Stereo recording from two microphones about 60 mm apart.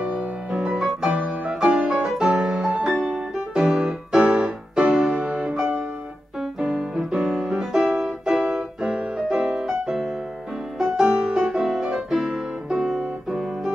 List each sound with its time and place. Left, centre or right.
0.0 s music: centre
0.5 s music: centre
5.1 s music: centre